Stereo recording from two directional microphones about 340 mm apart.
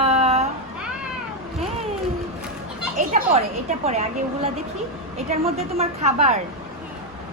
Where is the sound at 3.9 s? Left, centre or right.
Centre.